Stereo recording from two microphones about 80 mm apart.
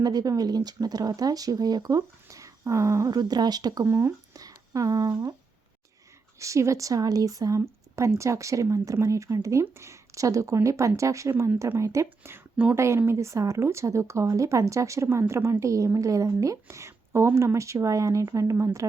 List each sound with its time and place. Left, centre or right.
0.0 s speech: right
2.2 s a sound: right
3.1 s speech: right
3.8 s speech: right
6.4 s speech: right
7.6 s speech: right
12.0 s speech: right
12.7 s speech: right